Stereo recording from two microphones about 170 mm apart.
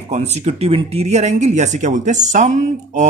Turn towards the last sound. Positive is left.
turn(degrees=-45)  # may be behind; listen again after turning